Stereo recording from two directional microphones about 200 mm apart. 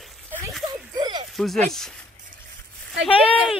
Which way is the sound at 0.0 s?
Centre (ahead or behind).